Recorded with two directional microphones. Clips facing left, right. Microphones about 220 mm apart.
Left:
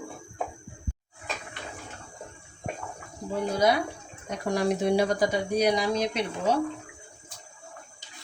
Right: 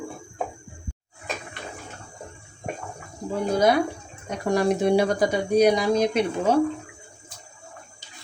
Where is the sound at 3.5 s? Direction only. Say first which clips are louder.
Right 5 dB; 50° right (ahead or behind).